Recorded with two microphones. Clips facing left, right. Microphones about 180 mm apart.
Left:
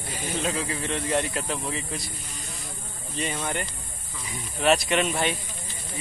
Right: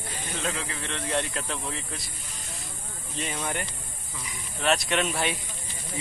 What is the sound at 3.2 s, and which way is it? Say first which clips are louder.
Speech: left 2 dB; 5° right (ahead or behind).